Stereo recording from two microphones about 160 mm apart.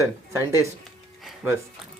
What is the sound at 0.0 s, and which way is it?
Speech, 15° right (ahead or behind).